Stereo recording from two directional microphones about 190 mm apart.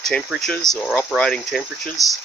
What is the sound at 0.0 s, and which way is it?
Speech, centre (ahead or behind).